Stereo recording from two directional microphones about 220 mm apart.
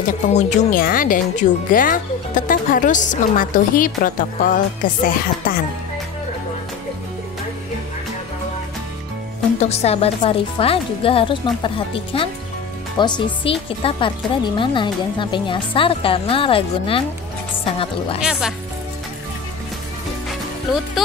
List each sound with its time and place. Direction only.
0.3 s speech: 35° left (ahead or behind)
9.6 s speech: 30° left (ahead or behind)
18.2 s speech: 5° right (ahead or behind)